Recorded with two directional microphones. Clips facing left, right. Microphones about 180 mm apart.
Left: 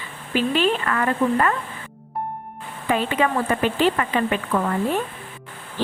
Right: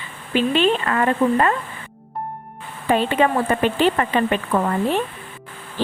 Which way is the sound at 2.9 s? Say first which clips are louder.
Right 3 dB; 30° right (ahead or behind).